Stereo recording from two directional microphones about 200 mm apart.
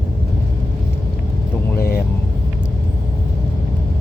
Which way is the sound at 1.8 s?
50° left (ahead or behind).